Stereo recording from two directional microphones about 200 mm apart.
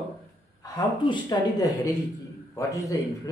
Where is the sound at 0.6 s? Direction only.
20° left (ahead or behind).